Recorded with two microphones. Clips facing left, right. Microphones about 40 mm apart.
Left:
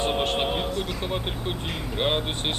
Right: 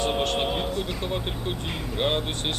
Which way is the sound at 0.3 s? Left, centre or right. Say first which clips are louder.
Even; centre.